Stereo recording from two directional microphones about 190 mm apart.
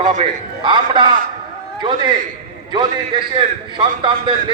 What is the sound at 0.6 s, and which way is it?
Speech, 25° right (ahead or behind).